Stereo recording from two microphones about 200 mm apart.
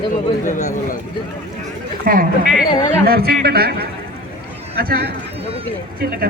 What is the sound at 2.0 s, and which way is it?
A man's voice, 45° right (ahead or behind).